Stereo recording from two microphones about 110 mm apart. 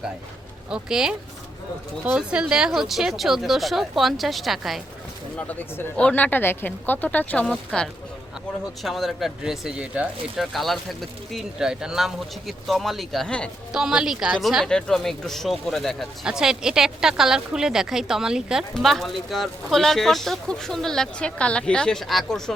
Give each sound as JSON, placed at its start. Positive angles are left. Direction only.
{"t": 0.7, "sound": "speech", "side_deg": -5}
{"t": 2.1, "sound": "speech", "side_deg": -10}
{"t": 5.5, "sound": "speech", "side_deg": 15}
{"t": 7.4, "sound": "speech", "side_deg": -5}
{"t": 8.8, "sound": "speech", "side_deg": 0}
{"t": 10.5, "sound": "speech", "side_deg": 0}
{"t": 13.7, "sound": "speech", "side_deg": -5}